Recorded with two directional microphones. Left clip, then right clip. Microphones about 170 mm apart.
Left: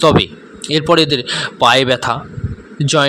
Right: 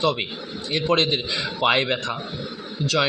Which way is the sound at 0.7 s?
55° left (ahead or behind).